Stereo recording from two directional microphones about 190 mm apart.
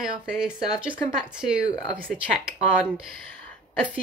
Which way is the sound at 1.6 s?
20° left (ahead or behind).